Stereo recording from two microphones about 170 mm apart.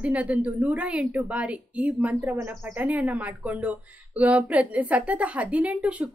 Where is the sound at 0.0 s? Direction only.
10° right (ahead or behind).